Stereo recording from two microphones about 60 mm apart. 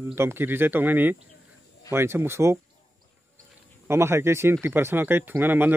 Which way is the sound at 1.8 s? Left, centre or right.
Right.